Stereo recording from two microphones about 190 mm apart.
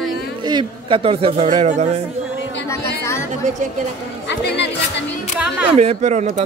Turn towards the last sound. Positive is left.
turn(degrees=-35)  # may be behind; listen again after turning